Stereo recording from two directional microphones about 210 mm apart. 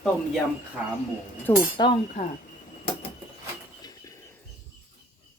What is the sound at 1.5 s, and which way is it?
Speech, 20° left (ahead or behind).